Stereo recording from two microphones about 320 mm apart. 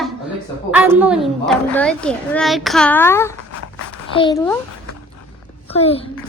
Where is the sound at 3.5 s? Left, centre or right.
Left.